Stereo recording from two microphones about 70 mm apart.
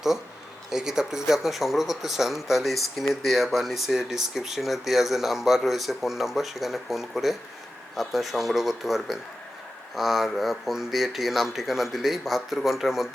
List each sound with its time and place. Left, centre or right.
0.7 s speech: centre